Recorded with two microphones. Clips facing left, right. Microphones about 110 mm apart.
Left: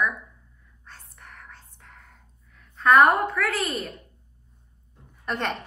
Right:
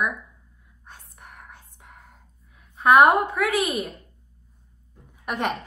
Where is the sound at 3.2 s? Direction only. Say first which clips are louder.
Right 3 dB; 15° right (ahead or behind).